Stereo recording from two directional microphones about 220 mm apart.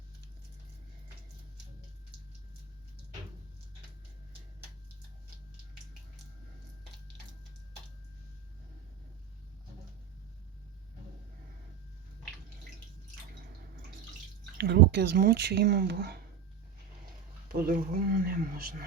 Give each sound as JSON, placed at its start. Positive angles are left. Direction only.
{"t": 14.6, "sound": "speech", "side_deg": -50}
{"t": 17.5, "sound": "speech", "side_deg": -40}